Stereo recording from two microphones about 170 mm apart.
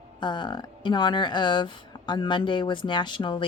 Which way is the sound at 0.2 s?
25° left (ahead or behind).